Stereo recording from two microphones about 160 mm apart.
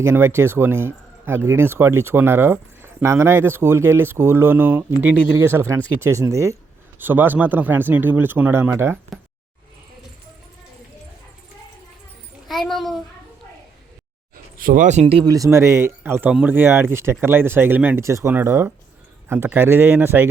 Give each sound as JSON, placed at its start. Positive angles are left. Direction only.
{"t": 0.0, "sound": "speech", "side_deg": -15}
{"t": 12.5, "sound": "a child's voice", "side_deg": 0}
{"t": 14.6, "sound": "speech", "side_deg": -55}
{"t": 15.0, "sound": "speech", "side_deg": -25}